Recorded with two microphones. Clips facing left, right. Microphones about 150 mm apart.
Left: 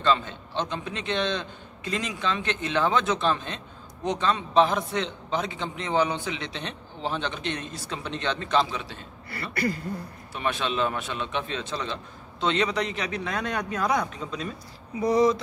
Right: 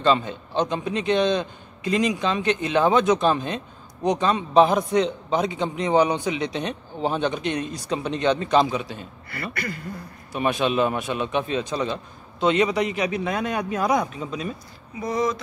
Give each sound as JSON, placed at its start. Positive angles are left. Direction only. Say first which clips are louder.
{"t": 0.0, "sound": "a man's voice", "louder": "right 4 dB", "side_deg": -15}
{"t": 9.3, "sound": "speech", "louder": "left 3 dB", "side_deg": 35}
{"t": 10.3, "sound": "a man's voice", "louder": "right 6 dB", "side_deg": -15}
{"t": 15.0, "sound": "speech", "louder": "left 3 dB", "side_deg": 35}